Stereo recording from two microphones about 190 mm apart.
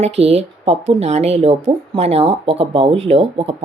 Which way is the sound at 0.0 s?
35° right (ahead or behind).